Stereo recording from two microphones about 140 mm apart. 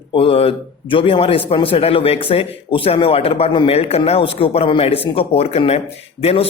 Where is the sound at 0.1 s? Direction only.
40° left (ahead or behind).